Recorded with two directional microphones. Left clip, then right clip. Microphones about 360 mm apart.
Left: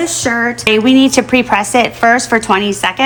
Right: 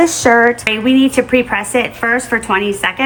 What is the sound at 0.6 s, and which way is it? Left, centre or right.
A woman's voice, centre.